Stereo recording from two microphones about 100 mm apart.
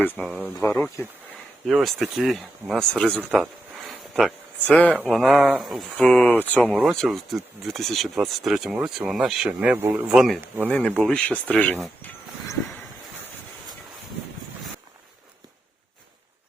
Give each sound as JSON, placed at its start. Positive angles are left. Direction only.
{"t": 0.2, "sound": "speech", "side_deg": 15}
{"t": 3.8, "sound": "a sound", "side_deg": 0}
{"t": 4.6, "sound": "speech", "side_deg": 15}
{"t": 6.0, "sound": "speech", "side_deg": 15}
{"t": 6.8, "sound": "speech", "side_deg": 0}
{"t": 9.5, "sound": "speech", "side_deg": -10}
{"t": 10.1, "sound": "speech", "side_deg": 0}
{"t": 10.7, "sound": "speech", "side_deg": 10}